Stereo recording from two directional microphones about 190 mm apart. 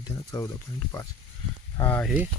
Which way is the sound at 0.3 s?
20° left (ahead or behind).